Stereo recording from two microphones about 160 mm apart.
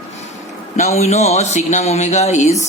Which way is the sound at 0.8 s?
45° left (ahead or behind).